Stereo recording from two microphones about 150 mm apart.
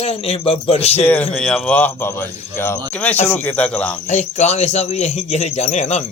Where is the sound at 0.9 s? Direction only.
10° left (ahead or behind).